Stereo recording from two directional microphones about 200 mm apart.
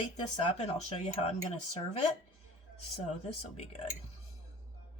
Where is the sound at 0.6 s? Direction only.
35° left (ahead or behind).